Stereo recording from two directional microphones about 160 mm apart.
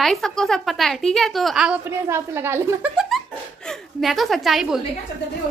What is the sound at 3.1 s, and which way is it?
Laughter, centre (ahead or behind).